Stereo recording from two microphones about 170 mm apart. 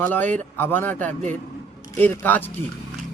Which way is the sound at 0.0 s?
10° left (ahead or behind).